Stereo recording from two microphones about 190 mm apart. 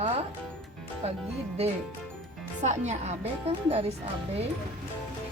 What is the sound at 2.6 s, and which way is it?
A woman's voice, 35° right (ahead or behind).